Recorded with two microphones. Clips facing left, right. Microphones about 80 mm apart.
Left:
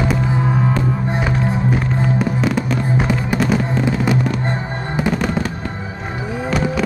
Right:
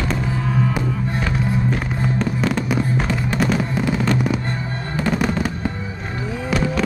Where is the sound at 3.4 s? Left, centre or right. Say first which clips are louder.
Even; centre.